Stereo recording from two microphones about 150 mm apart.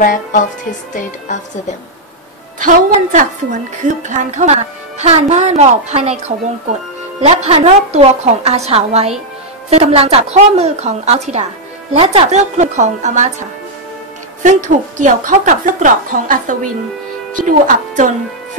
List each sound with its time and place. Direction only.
0.0 s music: 60° left (ahead or behind)
2.6 s a woman's voice: 60° right (ahead or behind)
14.4 s a woman's voice: 55° right (ahead or behind)